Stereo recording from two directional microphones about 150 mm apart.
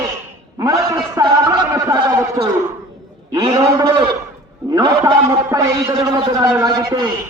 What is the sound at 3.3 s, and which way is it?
Speech, 25° right (ahead or behind).